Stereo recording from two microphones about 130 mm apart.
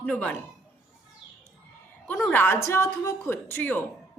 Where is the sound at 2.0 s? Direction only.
15° left (ahead or behind).